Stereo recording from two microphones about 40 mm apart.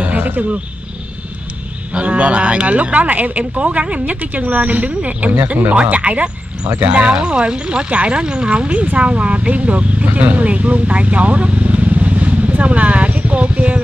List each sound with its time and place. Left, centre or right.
0.0 s a sound: right
2.0 s speech: right
4.0 s speech: right